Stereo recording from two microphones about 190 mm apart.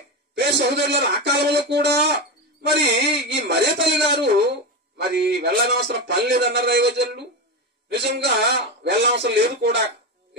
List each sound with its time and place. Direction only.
0.8 s speech: 60° right (ahead or behind)